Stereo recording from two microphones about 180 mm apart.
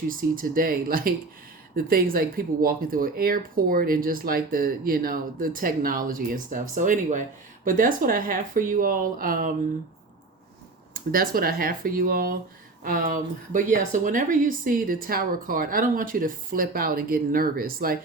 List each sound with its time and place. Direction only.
0.1 s speech: 50° right (ahead or behind)
10.9 s speech: 55° right (ahead or behind)